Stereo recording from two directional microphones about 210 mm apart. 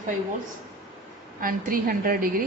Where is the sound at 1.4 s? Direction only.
40° right (ahead or behind).